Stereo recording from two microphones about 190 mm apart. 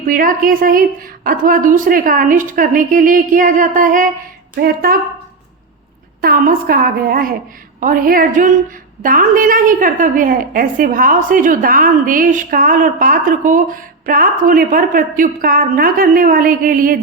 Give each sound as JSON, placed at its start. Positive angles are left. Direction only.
{"t": 0.1, "sound": "a woman's voice", "side_deg": -45}
{"t": 6.2, "sound": "a woman's voice", "side_deg": -50}